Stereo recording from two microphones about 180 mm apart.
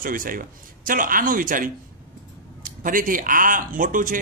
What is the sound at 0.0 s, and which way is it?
A man's voice, 50° right (ahead or behind).